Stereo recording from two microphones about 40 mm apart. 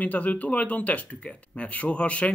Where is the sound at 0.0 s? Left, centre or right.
Left.